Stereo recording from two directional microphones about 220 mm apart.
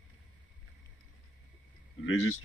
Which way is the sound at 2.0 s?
65° left (ahead or behind).